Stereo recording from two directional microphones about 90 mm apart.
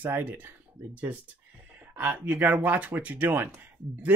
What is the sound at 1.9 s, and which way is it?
Speech, 15° right (ahead or behind).